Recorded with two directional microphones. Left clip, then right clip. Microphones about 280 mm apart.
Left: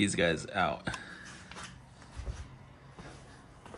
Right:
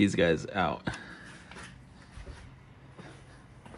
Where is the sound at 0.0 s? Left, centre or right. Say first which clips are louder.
Right 3 dB; centre.